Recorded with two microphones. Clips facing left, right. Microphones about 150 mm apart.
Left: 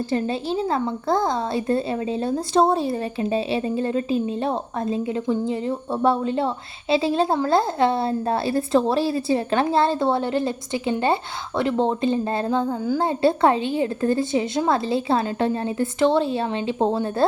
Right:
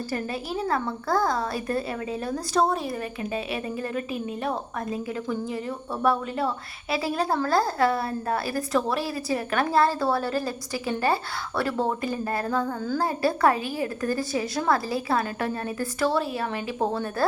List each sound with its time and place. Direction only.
0.1 s speech: 25° left (ahead or behind)